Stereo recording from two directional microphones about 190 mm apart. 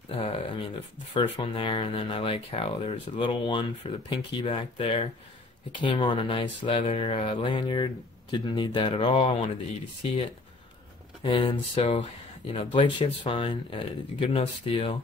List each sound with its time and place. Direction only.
0.2 s a sound: 30° left (ahead or behind)
1.1 s speech: 30° left (ahead or behind)
11.2 s speech: 30° left (ahead or behind)